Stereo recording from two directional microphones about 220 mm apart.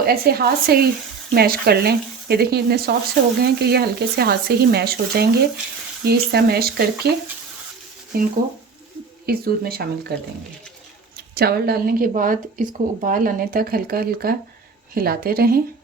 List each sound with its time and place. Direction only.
0.0 s speech: 45° right (ahead or behind)
11.3 s a woman's voice: 45° right (ahead or behind)